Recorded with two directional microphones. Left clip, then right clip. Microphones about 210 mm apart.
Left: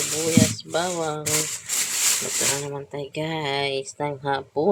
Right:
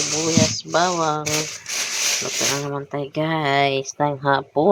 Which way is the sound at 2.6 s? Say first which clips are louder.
Right 5 dB; 10° right (ahead or behind).